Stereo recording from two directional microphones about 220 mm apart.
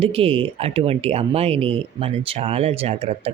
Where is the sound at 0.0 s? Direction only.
25° right (ahead or behind).